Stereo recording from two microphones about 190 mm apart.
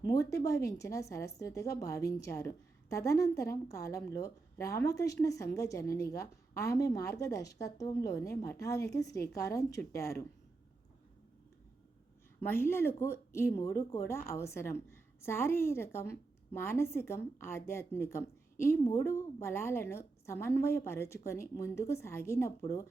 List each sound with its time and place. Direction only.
0.0 s a sound: 15° left (ahead or behind)
0.4 s speech: 15° left (ahead or behind)
12.4 s speech: 10° left (ahead or behind)